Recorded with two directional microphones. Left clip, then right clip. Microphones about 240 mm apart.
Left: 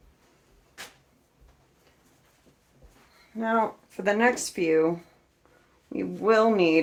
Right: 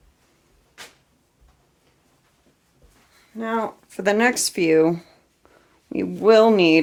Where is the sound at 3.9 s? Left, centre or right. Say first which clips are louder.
Right 6 dB; right.